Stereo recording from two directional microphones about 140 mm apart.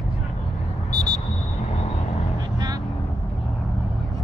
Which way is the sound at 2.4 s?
30° right (ahead or behind).